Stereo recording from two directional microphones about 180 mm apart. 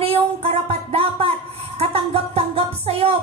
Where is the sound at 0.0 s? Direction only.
35° right (ahead or behind).